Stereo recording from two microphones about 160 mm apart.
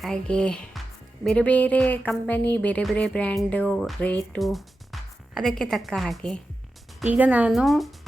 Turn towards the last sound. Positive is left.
turn(degrees=0)  # may be behind; listen again after turning